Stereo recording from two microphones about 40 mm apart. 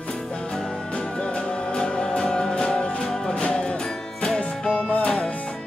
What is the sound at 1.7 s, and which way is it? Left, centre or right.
Music, left.